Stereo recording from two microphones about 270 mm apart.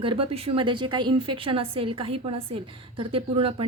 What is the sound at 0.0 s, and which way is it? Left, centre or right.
A woman's voice, centre.